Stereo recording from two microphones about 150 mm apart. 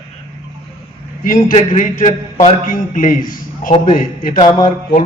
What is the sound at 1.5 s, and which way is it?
A man's voice, 60° left (ahead or behind).